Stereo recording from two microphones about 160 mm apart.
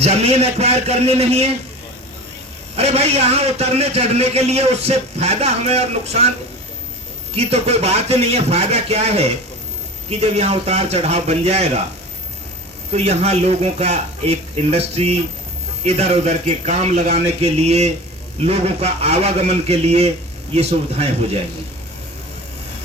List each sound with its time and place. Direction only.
0.0 s a man's voice: 40° right (ahead or behind)
2.7 s a man's voice: 40° right (ahead or behind)
7.3 s a man's voice: 40° right (ahead or behind)
12.9 s a man's voice: 40° right (ahead or behind)